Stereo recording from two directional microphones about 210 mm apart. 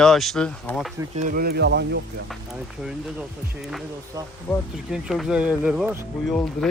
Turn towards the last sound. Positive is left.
turn(degrees=0)  # may be behind; listen again after turning